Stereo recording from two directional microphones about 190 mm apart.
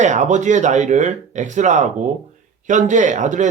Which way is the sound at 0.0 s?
40° right (ahead or behind).